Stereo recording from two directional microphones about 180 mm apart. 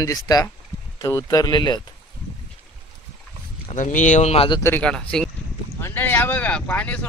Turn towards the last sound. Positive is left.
turn(degrees=5)  # may be behind; listen again after turning